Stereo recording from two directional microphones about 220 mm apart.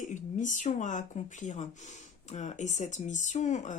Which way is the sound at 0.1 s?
35° left (ahead or behind).